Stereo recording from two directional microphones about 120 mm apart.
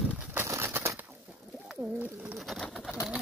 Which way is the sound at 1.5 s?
5° right (ahead or behind).